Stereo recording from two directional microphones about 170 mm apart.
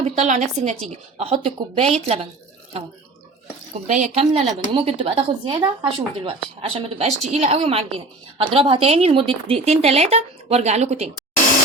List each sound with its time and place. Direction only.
0.0 s a woman's voice: 40° right (ahead or behind)
3.8 s a woman's voice: 45° right (ahead or behind)